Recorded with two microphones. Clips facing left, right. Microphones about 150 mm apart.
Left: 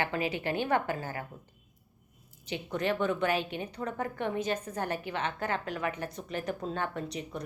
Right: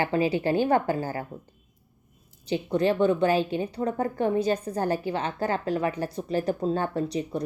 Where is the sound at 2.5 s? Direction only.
30° right (ahead or behind).